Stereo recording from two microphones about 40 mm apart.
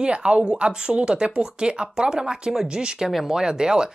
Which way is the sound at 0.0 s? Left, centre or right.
Right.